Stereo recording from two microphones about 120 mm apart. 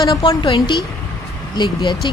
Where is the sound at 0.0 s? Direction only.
35° left (ahead or behind).